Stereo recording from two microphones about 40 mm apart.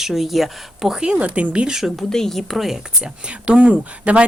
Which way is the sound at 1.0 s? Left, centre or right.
Right.